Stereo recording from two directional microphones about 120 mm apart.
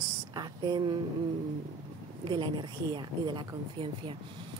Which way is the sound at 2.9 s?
40° right (ahead or behind).